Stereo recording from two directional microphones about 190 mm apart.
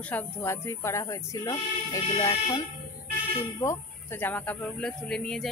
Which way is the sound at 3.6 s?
15° left (ahead or behind).